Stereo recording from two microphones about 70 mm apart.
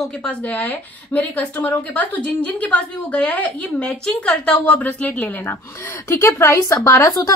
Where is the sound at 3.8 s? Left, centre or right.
Centre.